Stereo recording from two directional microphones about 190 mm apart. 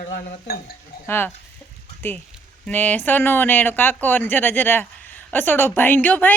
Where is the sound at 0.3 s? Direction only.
50° left (ahead or behind).